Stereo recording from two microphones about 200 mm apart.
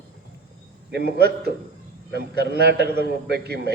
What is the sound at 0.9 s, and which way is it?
A man's voice, 55° right (ahead or behind).